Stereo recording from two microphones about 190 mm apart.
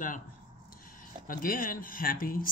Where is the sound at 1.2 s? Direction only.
45° left (ahead or behind).